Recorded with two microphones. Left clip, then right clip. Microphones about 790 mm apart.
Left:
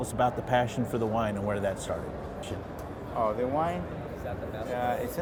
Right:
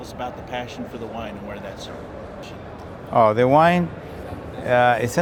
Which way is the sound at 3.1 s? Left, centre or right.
Right.